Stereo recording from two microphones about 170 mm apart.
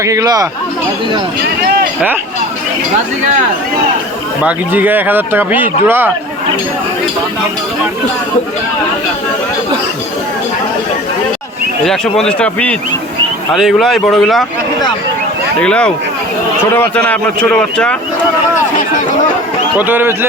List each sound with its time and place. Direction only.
0.0 s speech: 20° right (ahead or behind)
4.4 s speech: 10° right (ahead or behind)
11.9 s speech: 5° left (ahead or behind)
15.6 s a man's voice: 5° left (ahead or behind)
19.8 s speech: 10° right (ahead or behind)